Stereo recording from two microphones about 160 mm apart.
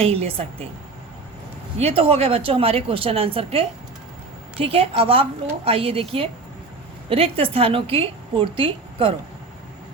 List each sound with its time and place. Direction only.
0.0 s a woman's voice: 35° right (ahead or behind)
1.8 s a woman's voice: 35° right (ahead or behind)